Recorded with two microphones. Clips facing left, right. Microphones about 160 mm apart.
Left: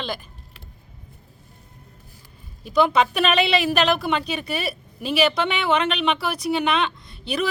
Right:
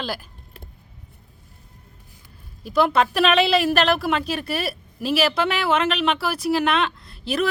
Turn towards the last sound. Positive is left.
turn(degrees=0)  # may be behind; listen again after turning